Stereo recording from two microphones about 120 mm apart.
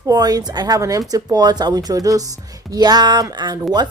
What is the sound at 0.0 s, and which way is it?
Speech, 30° right (ahead or behind).